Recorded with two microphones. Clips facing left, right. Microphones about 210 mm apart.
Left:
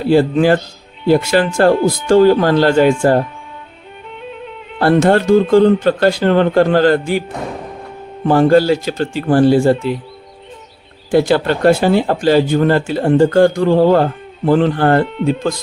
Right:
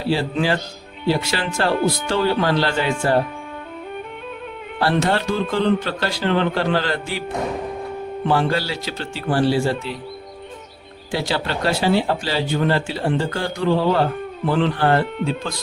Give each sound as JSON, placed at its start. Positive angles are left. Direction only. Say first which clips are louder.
{"t": 0.1, "sound": "speech", "louder": "left 9 dB", "side_deg": 50}
{"t": 4.8, "sound": "speech", "louder": "left 8 dB", "side_deg": 50}
{"t": 8.3, "sound": "speech", "louder": "left 11 dB", "side_deg": 45}
{"t": 11.1, "sound": "speech", "louder": "left 11 dB", "side_deg": 50}